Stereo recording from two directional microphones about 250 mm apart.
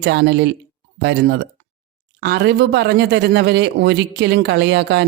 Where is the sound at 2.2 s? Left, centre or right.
Right.